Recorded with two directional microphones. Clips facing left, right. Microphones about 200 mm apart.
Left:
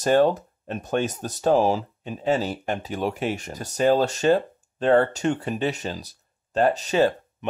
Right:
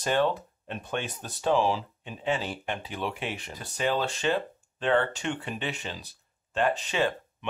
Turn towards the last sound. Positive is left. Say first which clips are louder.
# left 7 dB
turn(degrees=40)  # may be behind; listen again after turning